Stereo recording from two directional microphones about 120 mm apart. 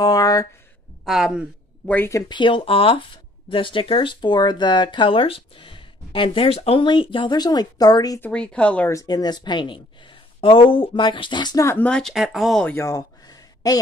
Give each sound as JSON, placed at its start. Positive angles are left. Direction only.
{"t": 0.0, "sound": "a sound", "side_deg": 30}
{"t": 1.0, "sound": "speech", "side_deg": -5}
{"t": 1.9, "sound": "speech", "side_deg": 15}
{"t": 2.1, "sound": "speech", "side_deg": 40}
{"t": 8.2, "sound": "speech", "side_deg": 10}
{"t": 8.9, "sound": "speech", "side_deg": 35}
{"t": 11.6, "sound": "speech", "side_deg": 20}
{"t": 11.9, "sound": "speech", "side_deg": 0}
{"t": 12.8, "sound": "a sound", "side_deg": 30}